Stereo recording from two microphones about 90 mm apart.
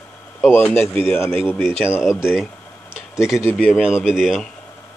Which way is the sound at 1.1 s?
25° left (ahead or behind).